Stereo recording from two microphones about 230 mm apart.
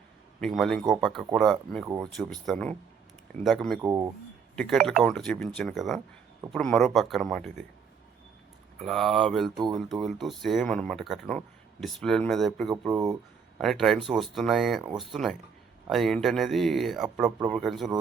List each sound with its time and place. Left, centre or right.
0.3 s speech: centre
3.8 s speech: centre
4.5 s speech: centre
8.8 s speech: centre
12.9 s speech: centre
13.6 s speech: centre